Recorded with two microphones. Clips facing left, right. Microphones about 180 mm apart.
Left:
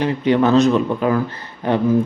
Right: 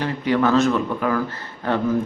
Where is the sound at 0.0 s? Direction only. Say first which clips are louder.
Left 4 dB; 20° left (ahead or behind).